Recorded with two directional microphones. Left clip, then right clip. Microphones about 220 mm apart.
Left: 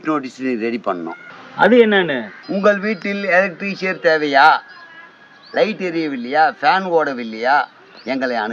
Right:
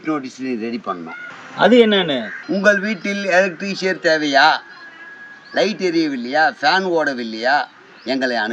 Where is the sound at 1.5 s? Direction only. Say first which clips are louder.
Left 1 dB; 10° right (ahead or behind).